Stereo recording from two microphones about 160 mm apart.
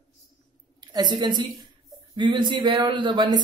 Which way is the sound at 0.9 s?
25° right (ahead or behind).